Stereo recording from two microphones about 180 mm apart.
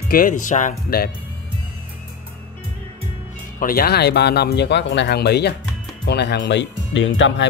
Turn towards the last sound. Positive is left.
turn(degrees=90)